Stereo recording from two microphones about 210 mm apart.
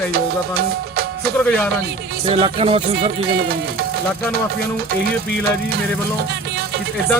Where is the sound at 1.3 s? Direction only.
5° left (ahead or behind).